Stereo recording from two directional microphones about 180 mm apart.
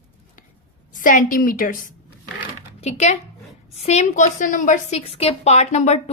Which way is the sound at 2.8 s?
40° left (ahead or behind).